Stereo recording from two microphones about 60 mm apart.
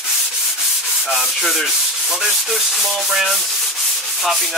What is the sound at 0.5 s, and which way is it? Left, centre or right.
Sanding, centre.